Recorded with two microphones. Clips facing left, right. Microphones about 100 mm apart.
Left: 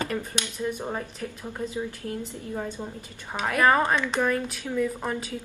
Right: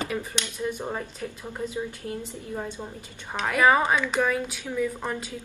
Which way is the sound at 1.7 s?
20° right (ahead or behind).